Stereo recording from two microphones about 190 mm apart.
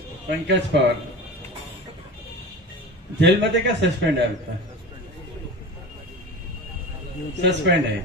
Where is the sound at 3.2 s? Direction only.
65° right (ahead or behind).